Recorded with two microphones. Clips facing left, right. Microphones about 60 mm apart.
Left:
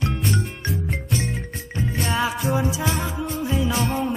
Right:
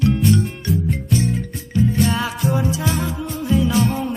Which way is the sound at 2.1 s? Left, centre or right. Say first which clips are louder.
Right 1 dB; centre.